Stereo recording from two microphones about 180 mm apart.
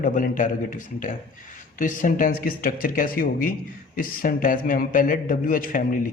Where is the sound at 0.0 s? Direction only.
45° left (ahead or behind).